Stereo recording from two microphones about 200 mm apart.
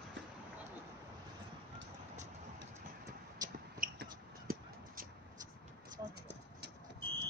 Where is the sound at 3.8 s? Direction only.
45° right (ahead or behind).